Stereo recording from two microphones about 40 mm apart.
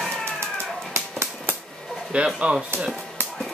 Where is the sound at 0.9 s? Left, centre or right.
Right.